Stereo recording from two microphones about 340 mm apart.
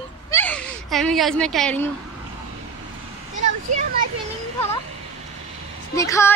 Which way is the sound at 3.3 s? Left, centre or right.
Right.